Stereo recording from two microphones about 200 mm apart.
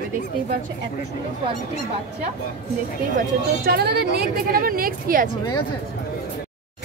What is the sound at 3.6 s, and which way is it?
Speech, 55° right (ahead or behind).